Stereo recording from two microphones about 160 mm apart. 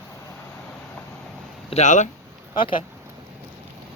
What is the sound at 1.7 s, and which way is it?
Speech, 45° left (ahead or behind).